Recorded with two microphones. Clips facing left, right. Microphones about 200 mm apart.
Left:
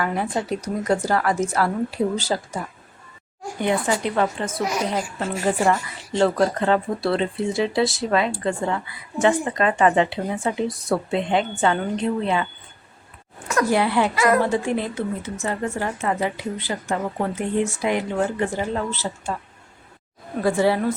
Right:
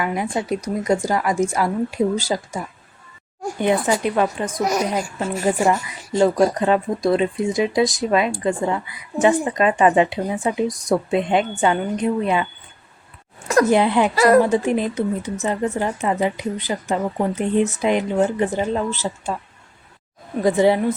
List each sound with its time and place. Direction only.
0.0 s a woman's voice: 10° right (ahead or behind)
4.6 s a woman's voice: 40° right (ahead or behind)
5.5 s speech: 15° right (ahead or behind)
13.7 s a woman's voice: 20° right (ahead or behind)
20.4 s a woman's voice: 20° right (ahead or behind)